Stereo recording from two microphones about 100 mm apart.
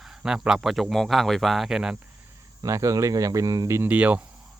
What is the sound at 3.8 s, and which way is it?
Speech, 15° right (ahead or behind).